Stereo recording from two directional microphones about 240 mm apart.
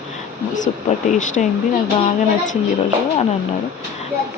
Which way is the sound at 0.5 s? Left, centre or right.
Left.